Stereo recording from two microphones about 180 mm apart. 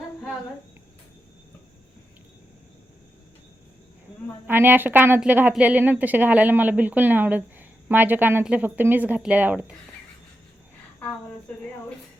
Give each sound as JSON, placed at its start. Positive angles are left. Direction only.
{"t": 4.4, "sound": "a woman's voice", "side_deg": -10}